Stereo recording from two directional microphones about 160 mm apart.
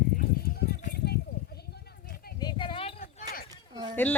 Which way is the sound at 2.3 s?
30° left (ahead or behind).